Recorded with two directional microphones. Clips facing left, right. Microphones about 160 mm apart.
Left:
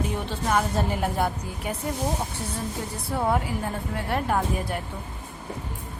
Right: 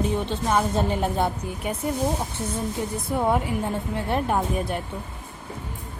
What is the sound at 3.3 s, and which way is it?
A woman's voice, 20° right (ahead or behind).